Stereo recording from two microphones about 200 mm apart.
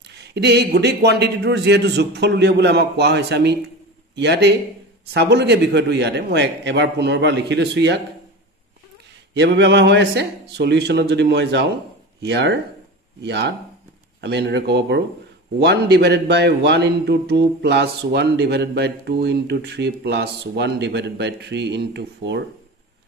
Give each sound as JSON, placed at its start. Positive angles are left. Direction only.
{"t": 0.1, "sound": "a man's voice", "side_deg": -55}
{"t": 9.3, "sound": "a man's voice", "side_deg": -60}